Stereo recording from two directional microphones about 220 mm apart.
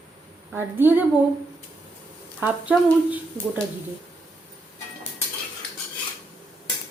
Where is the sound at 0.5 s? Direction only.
10° right (ahead or behind).